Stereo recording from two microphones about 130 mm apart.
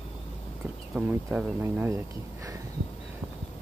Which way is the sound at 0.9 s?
10° right (ahead or behind).